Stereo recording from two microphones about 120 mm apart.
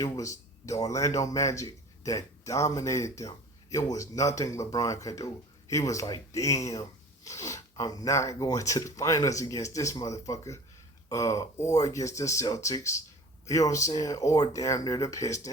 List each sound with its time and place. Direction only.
0.0 s speech: 25° left (ahead or behind)